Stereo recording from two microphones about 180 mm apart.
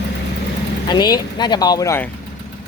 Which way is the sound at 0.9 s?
25° left (ahead or behind).